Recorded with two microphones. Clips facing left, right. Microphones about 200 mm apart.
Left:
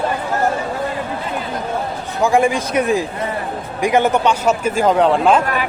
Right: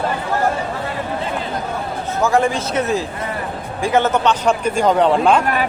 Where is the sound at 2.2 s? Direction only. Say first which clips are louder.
Left 2 dB; 15° left (ahead or behind).